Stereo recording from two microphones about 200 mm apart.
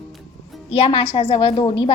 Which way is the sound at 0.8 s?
25° left (ahead or behind).